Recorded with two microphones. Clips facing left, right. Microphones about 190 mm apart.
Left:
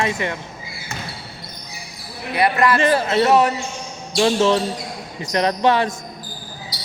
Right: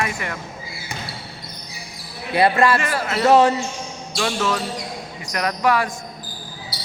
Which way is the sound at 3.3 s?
25° right (ahead or behind).